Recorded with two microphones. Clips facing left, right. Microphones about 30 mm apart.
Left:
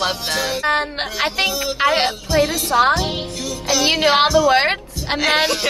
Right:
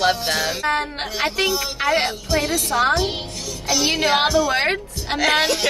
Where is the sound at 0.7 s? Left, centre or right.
Left.